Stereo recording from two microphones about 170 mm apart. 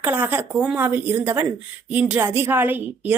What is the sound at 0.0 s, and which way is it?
Speech, 10° right (ahead or behind).